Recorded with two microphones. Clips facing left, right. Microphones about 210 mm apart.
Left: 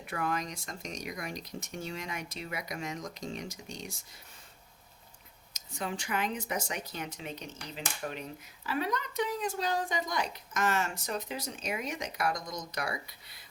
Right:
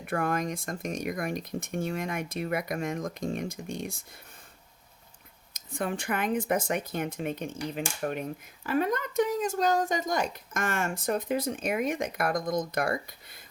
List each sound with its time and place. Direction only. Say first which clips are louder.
0.0 s speech: right 5 dB; 50° right (ahead or behind)
5.5 s speech: right 5 dB; 55° right (ahead or behind)